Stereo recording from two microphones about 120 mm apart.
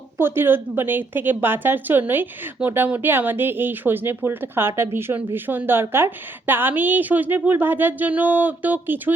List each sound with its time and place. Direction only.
0.2 s a woman's voice: 20° right (ahead or behind)